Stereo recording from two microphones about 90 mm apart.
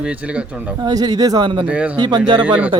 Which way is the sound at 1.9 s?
50° right (ahead or behind).